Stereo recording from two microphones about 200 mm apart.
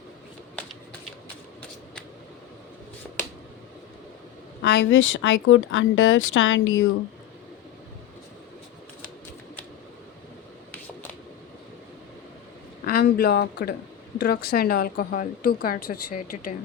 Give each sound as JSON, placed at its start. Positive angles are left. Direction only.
{"t": 4.6, "sound": "speech", "side_deg": 65}
{"t": 12.8, "sound": "a woman's voice", "side_deg": 50}